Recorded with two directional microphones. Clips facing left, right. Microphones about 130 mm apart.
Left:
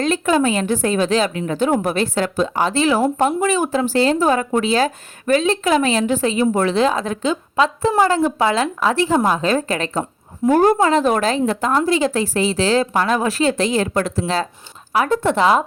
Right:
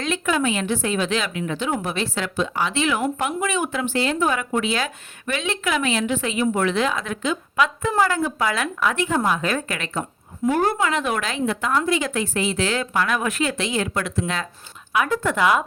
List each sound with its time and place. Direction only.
0.0 s a woman's voice: 35° left (ahead or behind)